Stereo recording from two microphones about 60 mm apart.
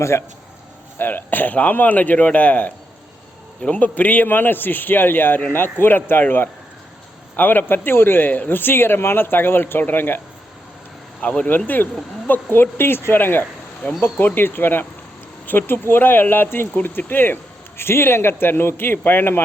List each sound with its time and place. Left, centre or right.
0.0 s speech: left
0.9 s a man's voice: left
11.2 s a man's voice: left